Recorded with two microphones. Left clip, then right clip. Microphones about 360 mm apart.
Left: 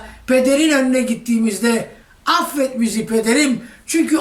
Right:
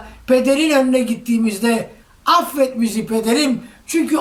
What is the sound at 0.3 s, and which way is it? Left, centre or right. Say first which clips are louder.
A woman's voice: even; centre.